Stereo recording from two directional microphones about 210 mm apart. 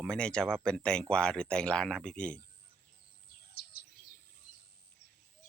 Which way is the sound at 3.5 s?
50° left (ahead or behind).